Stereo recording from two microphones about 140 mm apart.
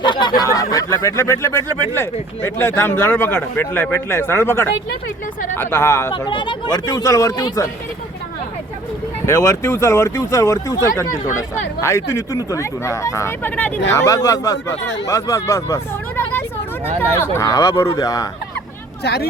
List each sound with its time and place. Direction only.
0.0 s a man's voice: 35° left (ahead or behind)
6.1 s speech: 35° left (ahead or behind)
9.2 s speech: 20° left (ahead or behind)
13.9 s speech: 25° left (ahead or behind)